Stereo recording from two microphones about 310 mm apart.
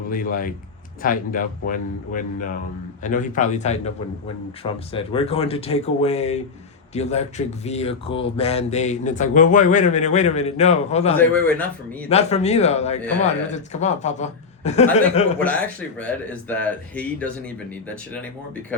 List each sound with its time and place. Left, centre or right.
0.1 s speech: left
11.2 s speech: centre
12.0 s speech: left
15.4 s speech: centre